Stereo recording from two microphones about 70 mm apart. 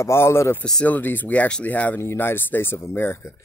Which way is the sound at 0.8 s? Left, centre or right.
Left.